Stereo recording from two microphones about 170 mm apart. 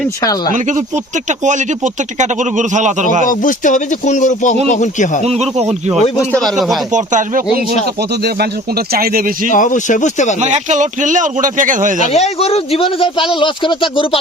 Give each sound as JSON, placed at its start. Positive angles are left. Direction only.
{"t": 0.2, "sound": "speech", "side_deg": 20}
{"t": 1.5, "sound": "speech", "side_deg": -45}
{"t": 3.2, "sound": "speech", "side_deg": 50}
{"t": 5.2, "sound": "speech", "side_deg": -40}
{"t": 6.3, "sound": "speech", "side_deg": 0}
{"t": 6.9, "sound": "speech", "side_deg": -50}
{"t": 8.9, "sound": "speech", "side_deg": -60}
{"t": 9.5, "sound": "speech", "side_deg": 50}
{"t": 10.4, "sound": "speech", "side_deg": -45}
{"t": 11.9, "sound": "speech", "side_deg": 40}